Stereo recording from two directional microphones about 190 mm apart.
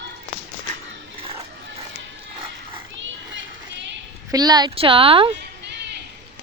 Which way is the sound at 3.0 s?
70° right (ahead or behind).